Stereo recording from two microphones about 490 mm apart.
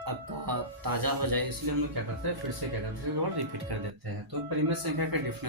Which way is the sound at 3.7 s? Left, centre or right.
Right.